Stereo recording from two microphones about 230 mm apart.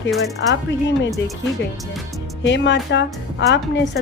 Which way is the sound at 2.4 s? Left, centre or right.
Left.